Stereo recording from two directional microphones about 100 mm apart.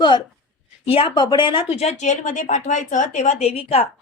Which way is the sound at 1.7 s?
90° left.